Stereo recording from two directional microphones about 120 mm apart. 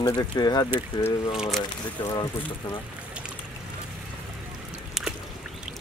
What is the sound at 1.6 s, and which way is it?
Speech, 40° left (ahead or behind).